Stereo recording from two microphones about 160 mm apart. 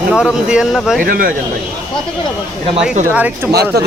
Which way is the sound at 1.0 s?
65° right (ahead or behind).